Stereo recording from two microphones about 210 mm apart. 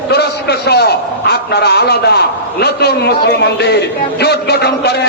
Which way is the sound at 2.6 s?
50° left (ahead or behind).